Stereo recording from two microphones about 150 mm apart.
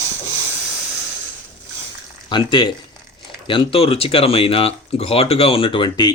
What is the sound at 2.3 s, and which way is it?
Speech, 30° left (ahead or behind).